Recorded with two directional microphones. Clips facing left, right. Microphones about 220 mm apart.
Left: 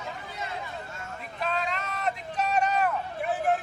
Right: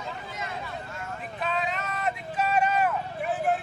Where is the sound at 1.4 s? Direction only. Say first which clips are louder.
Even; centre (ahead or behind).